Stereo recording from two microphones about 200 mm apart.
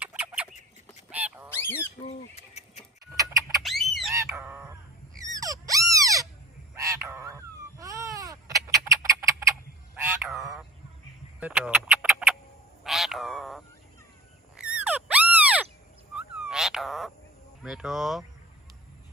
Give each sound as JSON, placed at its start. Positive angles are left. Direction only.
{"t": 0.0, "sound": "bird", "side_deg": -5}
{"t": 1.1, "sound": "honk", "side_deg": -10}
{"t": 1.5, "sound": "goose", "side_deg": 10}
{"t": 2.3, "sound": "a sound", "side_deg": 35}
{"t": 3.2, "sound": "a sound", "side_deg": -15}
{"t": 3.6, "sound": "duck", "side_deg": 0}
{"t": 4.1, "sound": "squawk", "side_deg": -15}
{"t": 5.2, "sound": "a sound", "side_deg": -15}
{"t": 9.9, "sound": "frog", "side_deg": -5}
{"t": 11.3, "sound": "bird", "side_deg": -5}
{"t": 12.8, "sound": "a sound", "side_deg": 0}
{"t": 14.6, "sound": "frog", "side_deg": -5}
{"t": 16.1, "sound": "cat", "side_deg": -5}
{"t": 17.6, "sound": "speech", "side_deg": 0}